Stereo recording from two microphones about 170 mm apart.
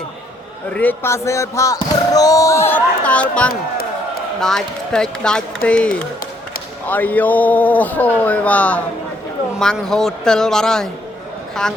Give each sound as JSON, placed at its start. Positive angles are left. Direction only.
{"t": 0.7, "sound": "speech", "side_deg": 10}